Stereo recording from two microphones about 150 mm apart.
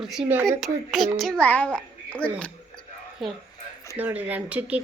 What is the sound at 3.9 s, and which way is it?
Speech, 10° right (ahead or behind).